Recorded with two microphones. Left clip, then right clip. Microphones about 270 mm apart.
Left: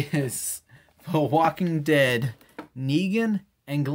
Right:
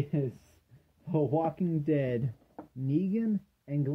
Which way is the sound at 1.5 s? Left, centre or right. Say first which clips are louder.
Left 8 dB; centre.